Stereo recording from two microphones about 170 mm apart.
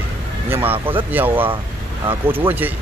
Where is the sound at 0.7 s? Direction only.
30° right (ahead or behind).